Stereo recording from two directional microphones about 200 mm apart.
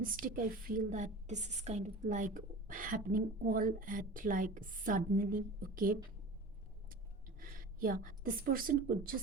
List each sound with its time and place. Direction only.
0.0 s a woman's voice: 45° right (ahead or behind)
7.3 s a woman's voice: 45° right (ahead or behind)